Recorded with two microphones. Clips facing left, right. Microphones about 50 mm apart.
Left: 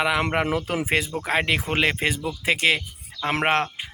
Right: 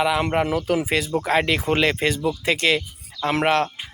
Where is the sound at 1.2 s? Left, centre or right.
Centre.